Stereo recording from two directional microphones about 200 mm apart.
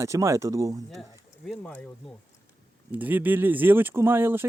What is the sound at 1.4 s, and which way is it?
Speech, 5° left (ahead or behind).